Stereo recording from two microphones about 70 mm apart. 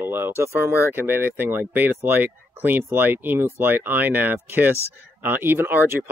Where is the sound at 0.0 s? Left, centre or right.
Right.